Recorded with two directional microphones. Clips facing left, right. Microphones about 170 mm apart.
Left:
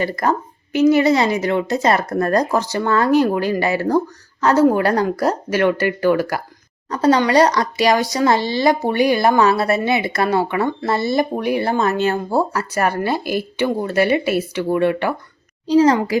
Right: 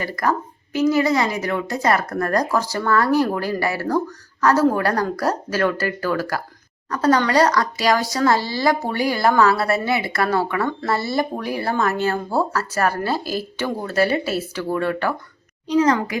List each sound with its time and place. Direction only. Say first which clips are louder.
0.0 s speech: left 3 dB; 25° left (ahead or behind)
15.6 s a child's voice: left 4 dB; 30° left (ahead or behind)